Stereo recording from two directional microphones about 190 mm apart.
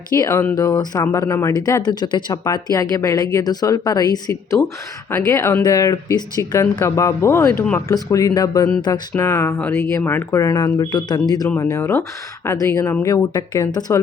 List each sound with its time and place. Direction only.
0.1 s speech: 20° left (ahead or behind)